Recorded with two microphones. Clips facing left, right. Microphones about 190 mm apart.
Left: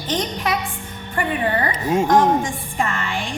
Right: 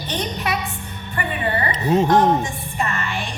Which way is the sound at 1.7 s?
10° left (ahead or behind).